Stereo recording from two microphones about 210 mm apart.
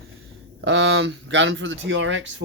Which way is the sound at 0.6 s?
60° right (ahead or behind).